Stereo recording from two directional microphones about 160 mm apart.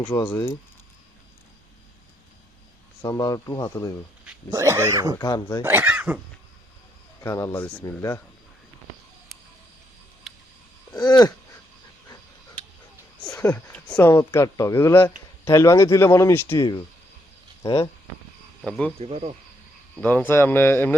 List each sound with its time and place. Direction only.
0.2 s speech: 15° left (ahead or behind)
3.0 s speech: 20° left (ahead or behind)
4.5 s speech: 20° right (ahead or behind)
5.2 s speech: 25° left (ahead or behind)
5.6 s speech: 10° right (ahead or behind)
7.2 s speech: 20° left (ahead or behind)
10.9 s a sound: 25° left (ahead or behind)
13.3 s speech: 10° left (ahead or behind)
16.6 s speech: 25° left (ahead or behind)
18.6 s speech: 5° left (ahead or behind)
18.9 s speech: 40° right (ahead or behind)
20.0 s speech: 10° left (ahead or behind)